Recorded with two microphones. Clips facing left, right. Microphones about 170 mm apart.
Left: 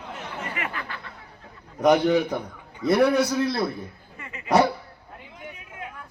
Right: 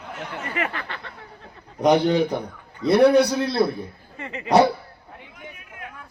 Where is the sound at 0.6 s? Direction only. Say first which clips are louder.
Right 4 dB; 70° right (ahead or behind).